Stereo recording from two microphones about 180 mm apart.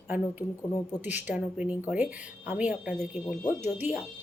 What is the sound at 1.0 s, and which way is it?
Speech, 10° right (ahead or behind).